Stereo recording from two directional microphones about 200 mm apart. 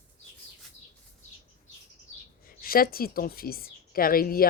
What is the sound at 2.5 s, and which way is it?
A woman's voice, 45° left (ahead or behind).